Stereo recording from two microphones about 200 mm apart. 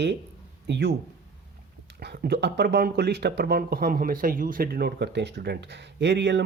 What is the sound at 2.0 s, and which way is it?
Speech, 55° right (ahead or behind).